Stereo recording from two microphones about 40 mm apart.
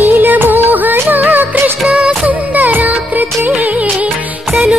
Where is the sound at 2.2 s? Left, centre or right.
Right.